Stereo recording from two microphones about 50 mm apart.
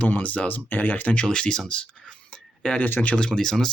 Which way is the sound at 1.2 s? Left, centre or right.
Centre.